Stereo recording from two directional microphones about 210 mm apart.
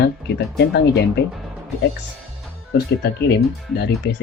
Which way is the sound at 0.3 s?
55° left (ahead or behind).